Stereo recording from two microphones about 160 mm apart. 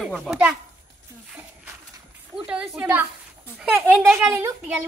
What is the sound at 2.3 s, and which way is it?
A woman's voice, 5° right (ahead or behind).